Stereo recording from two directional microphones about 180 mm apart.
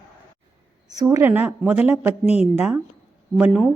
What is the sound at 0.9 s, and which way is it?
A woman's voice, 20° right (ahead or behind).